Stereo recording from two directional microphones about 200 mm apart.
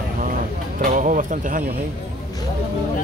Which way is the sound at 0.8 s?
40° right (ahead or behind).